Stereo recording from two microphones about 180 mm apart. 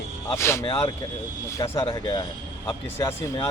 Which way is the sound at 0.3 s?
15° left (ahead or behind).